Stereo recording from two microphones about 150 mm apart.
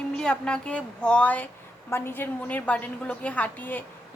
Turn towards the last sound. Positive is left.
turn(degrees=10)  # may be behind; listen again after turning